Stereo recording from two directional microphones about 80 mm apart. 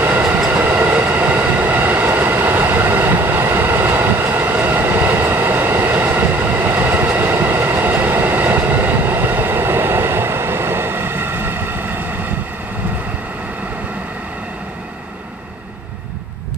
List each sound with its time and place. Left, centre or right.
0.0 s train: right